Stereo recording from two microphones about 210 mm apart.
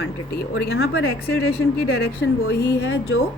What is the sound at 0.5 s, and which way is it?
A woman's voice, 60° left (ahead or behind).